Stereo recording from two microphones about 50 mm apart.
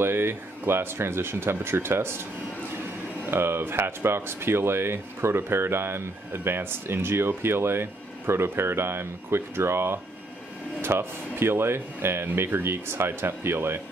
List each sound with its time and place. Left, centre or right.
0.0 s speech: right
3.3 s speech: right